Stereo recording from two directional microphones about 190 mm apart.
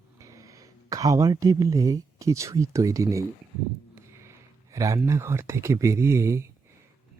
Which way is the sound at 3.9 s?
15° right (ahead or behind).